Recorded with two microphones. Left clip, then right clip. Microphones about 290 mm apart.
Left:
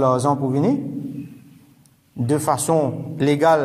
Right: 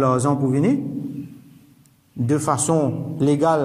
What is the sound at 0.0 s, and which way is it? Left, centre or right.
Speech, centre.